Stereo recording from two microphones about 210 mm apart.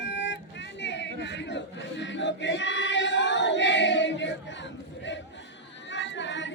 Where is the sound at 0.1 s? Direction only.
55° left (ahead or behind).